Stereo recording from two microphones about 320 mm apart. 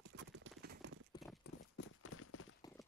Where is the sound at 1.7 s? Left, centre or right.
Left.